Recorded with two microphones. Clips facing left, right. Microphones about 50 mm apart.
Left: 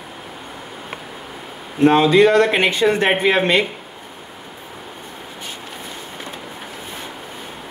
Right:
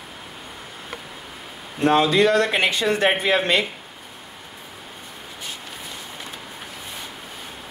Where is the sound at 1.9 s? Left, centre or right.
Left.